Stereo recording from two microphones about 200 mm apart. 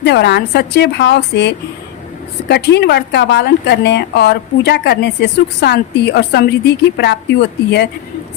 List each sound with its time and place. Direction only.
0.0 s a woman's voice: 55° left (ahead or behind)